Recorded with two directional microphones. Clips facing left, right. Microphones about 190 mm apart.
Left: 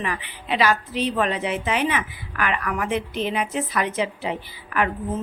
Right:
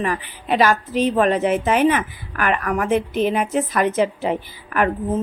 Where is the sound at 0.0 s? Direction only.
45° right (ahead or behind).